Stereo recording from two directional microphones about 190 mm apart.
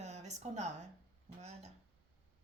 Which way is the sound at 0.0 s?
35° right (ahead or behind).